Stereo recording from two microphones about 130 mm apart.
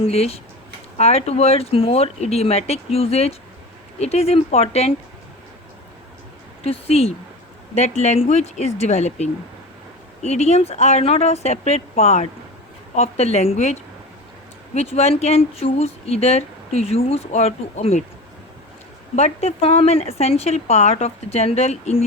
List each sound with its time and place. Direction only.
0.0 s a woman's voice: 50° left (ahead or behind)
6.7 s a woman's voice: 50° left (ahead or behind)
19.1 s a woman's voice: 55° left (ahead or behind)